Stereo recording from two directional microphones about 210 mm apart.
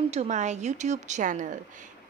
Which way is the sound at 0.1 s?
35° right (ahead or behind).